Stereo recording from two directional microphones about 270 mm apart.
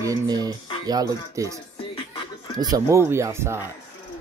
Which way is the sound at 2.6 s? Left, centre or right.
Centre.